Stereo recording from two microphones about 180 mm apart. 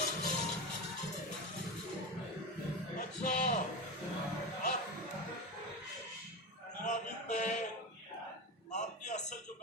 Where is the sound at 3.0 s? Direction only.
40° left (ahead or behind).